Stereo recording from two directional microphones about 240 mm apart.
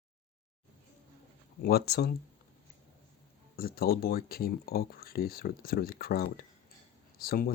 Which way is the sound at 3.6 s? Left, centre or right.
Left.